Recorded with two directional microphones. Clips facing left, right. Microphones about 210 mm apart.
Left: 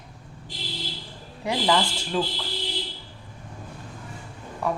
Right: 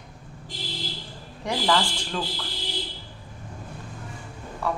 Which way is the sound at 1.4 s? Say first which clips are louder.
Left 1 dB; 10° left (ahead or behind).